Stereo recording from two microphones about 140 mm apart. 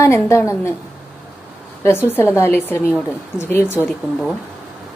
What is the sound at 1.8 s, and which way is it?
Speech, 15° left (ahead or behind).